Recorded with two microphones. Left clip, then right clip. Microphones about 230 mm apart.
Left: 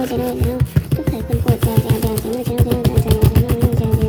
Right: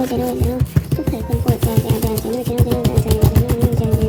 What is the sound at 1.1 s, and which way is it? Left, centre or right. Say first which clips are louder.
Music: left 1 dB; centre.